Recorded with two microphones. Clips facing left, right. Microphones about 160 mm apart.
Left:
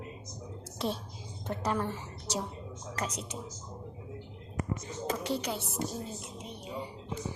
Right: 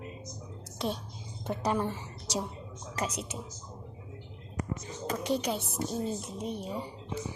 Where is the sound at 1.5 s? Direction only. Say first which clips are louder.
Right 2 dB; 15° right (ahead or behind).